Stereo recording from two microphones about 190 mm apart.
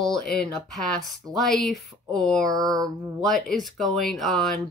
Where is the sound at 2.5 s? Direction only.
20° right (ahead or behind).